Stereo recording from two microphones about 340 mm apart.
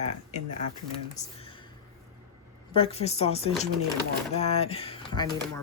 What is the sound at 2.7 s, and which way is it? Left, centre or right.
Speech, centre.